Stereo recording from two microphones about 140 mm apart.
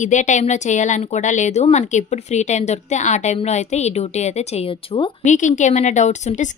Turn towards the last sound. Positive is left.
turn(degrees=55)  # may be behind; listen again after turning